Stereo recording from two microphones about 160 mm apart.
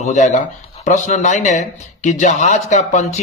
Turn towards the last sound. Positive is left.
turn(degrees=45)  # may be behind; listen again after turning